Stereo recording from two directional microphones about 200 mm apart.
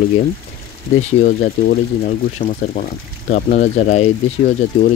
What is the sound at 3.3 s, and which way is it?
Speech, 40° left (ahead or behind).